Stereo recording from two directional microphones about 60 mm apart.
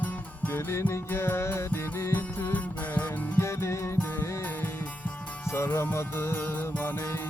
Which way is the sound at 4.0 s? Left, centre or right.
Left.